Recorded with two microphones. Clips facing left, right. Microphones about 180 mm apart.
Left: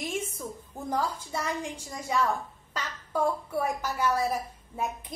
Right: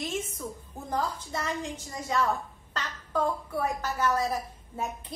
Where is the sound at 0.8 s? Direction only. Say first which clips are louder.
Left 1 dB; 10° left (ahead or behind).